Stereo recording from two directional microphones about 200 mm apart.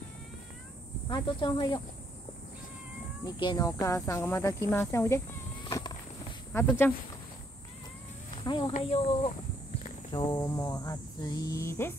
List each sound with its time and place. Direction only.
1.0 s speech: 20° left (ahead or behind)
3.3 s speech: 20° left (ahead or behind)
5.7 s a sound: 20° left (ahead or behind)
6.5 s speech: 10° left (ahead or behind)
8.5 s speech: 20° left (ahead or behind)
9.8 s cricket: 25° left (ahead or behind)